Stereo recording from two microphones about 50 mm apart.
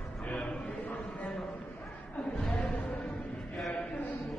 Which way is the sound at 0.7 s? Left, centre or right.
Left.